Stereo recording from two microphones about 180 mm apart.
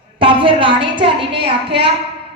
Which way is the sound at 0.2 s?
30° right (ahead or behind).